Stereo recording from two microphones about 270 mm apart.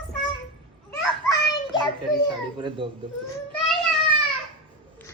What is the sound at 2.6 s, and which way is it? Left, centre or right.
Speech, centre.